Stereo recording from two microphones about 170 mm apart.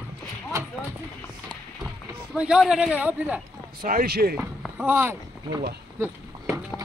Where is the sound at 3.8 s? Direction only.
60° right (ahead or behind).